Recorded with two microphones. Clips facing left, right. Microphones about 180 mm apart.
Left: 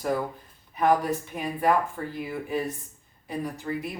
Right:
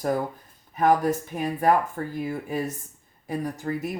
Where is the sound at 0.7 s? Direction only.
45° right (ahead or behind).